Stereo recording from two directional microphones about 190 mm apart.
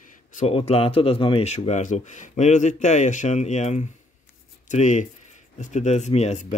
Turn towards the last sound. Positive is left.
turn(degrees=35)  # may be behind; listen again after turning